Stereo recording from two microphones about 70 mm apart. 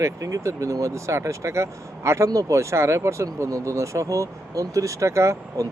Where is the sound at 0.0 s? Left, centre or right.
Right.